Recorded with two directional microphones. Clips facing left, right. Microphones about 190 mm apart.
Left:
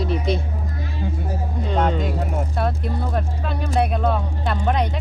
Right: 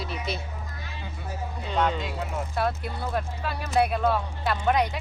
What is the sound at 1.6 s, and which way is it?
Speech, 35° left (ahead or behind).